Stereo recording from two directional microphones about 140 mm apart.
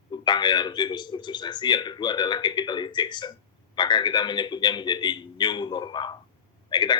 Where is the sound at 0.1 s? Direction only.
35° left (ahead or behind).